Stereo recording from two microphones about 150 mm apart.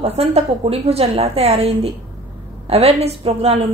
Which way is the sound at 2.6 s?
45° right (ahead or behind).